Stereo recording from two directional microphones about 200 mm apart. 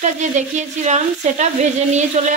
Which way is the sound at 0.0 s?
35° right (ahead or behind).